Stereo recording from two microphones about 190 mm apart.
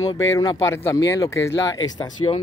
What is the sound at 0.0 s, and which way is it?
Speech, 15° left (ahead or behind).